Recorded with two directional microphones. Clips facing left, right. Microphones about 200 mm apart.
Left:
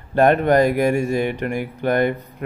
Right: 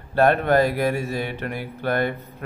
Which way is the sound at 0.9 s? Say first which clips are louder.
Left 6 dB; 50° left (ahead or behind).